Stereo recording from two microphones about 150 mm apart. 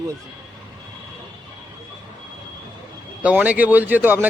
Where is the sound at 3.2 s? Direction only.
10° right (ahead or behind).